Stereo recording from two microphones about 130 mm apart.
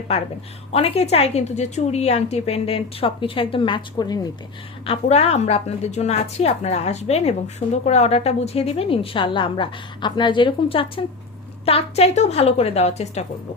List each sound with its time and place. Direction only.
0.7 s a woman's voice: 50° left (ahead or behind); by 4.2 s 30° left (ahead or behind)
4.9 s a woman's voice: 50° left (ahead or behind)